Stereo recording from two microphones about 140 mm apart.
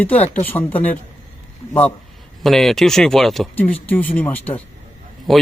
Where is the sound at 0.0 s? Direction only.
10° left (ahead or behind).